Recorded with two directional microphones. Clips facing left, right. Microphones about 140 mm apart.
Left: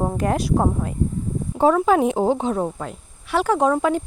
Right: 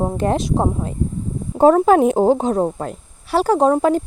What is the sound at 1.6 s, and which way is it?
Speech, 45° right (ahead or behind).